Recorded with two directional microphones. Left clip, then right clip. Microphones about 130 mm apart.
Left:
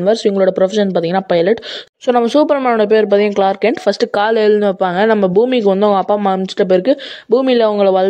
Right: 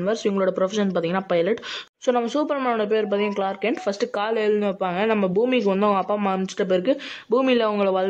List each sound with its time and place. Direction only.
0.0 s speech: 35° left (ahead or behind)